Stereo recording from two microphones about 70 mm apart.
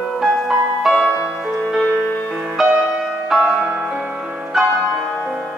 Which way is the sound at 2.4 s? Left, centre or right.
Centre.